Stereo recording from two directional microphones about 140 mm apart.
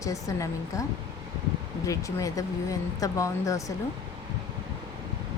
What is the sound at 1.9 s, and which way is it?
Speech, 25° left (ahead or behind).